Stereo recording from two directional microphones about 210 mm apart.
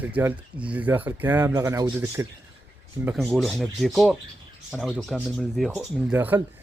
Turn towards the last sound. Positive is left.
turn(degrees=-10)  # may be behind; listen again after turning